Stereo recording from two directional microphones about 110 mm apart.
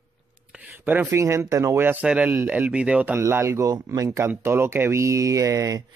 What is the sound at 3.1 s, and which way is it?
Speech, 25° right (ahead or behind).